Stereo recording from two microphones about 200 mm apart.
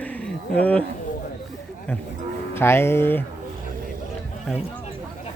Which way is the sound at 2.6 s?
10° left (ahead or behind).